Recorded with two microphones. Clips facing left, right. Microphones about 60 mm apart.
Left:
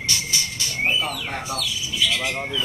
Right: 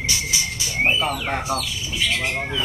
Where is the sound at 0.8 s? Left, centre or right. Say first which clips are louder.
Right 3 dB; right.